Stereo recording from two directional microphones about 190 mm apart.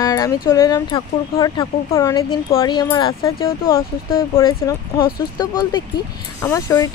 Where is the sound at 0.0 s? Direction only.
20° left (ahead or behind).